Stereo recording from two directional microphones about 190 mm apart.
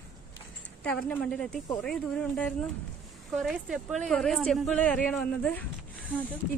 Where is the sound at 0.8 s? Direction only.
5° left (ahead or behind).